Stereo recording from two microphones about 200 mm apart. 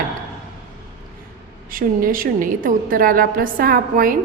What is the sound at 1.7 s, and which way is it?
A woman's voice, 45° right (ahead or behind).